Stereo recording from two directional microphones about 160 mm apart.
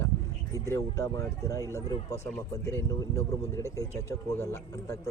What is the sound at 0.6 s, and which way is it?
Speech, 20° left (ahead or behind).